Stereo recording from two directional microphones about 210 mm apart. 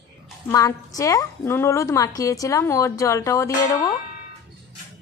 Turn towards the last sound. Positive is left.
turn(degrees=15)  # may be behind; listen again after turning